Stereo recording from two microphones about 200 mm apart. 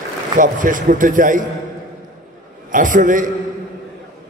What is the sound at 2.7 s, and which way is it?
Speech, 40° right (ahead or behind).